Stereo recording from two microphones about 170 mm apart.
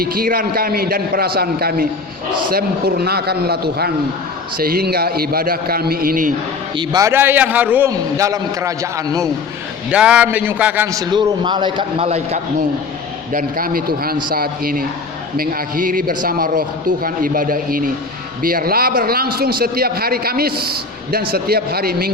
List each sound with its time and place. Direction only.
0.0 s a man's voice: 60° right (ahead or behind)
6.7 s a man's voice: 20° right (ahead or behind)
7.9 s a man's voice: 20° right (ahead or behind)
9.9 s a man's voice: 5° right (ahead or behind)
10.9 s a man's voice: 25° right (ahead or behind)
13.3 s a man's voice: 60° right (ahead or behind)